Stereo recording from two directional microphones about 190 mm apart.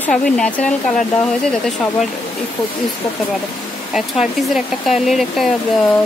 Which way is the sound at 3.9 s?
Centre (ahead or behind).